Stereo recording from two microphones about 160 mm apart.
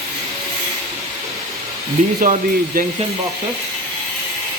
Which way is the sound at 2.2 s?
60° right (ahead or behind).